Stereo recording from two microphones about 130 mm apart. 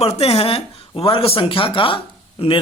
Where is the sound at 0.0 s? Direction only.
50° left (ahead or behind).